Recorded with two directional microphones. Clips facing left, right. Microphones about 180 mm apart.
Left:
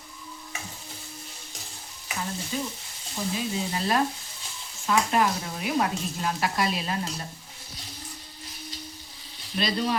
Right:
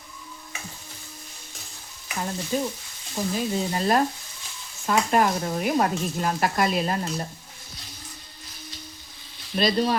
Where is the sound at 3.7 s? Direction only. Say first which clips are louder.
Right 3 dB; 45° right (ahead or behind).